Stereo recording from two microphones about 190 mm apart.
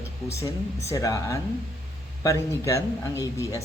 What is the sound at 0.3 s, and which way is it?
Speech, 15° left (ahead or behind).